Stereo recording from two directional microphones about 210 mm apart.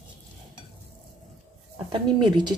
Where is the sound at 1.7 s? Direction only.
25° right (ahead or behind).